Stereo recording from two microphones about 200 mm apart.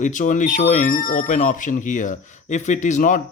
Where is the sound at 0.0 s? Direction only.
40° left (ahead or behind).